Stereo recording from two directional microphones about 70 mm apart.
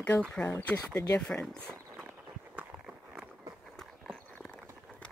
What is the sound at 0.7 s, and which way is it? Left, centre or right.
Speech, left.